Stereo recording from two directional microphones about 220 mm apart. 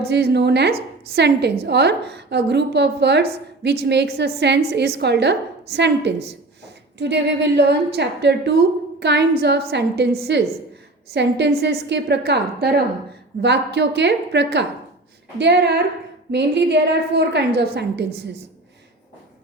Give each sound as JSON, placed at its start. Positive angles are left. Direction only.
{"t": 0.0, "sound": "a woman's voice", "side_deg": -45}